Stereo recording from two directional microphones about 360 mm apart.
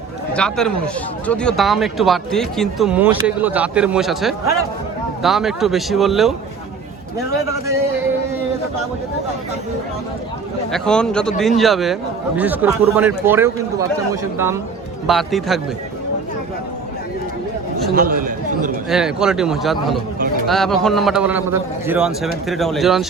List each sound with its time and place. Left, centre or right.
0.3 s speech: centre
10.7 s a man's voice: centre
17.9 s a sound: right
18.9 s speech: centre